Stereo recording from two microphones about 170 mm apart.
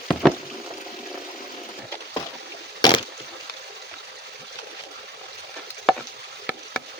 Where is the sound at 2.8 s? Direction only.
25° left (ahead or behind).